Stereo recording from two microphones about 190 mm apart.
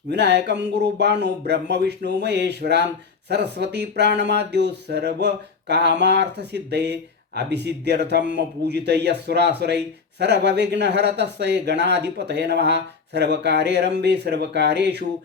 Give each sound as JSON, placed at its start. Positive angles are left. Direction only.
{"t": 0.1, "sound": "speech", "side_deg": -60}